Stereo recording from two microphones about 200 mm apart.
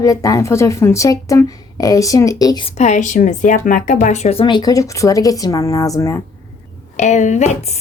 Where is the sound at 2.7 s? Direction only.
35° left (ahead or behind); by 6.2 s 15° left (ahead or behind).